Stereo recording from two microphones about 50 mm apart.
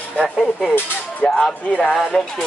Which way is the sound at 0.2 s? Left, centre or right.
Centre.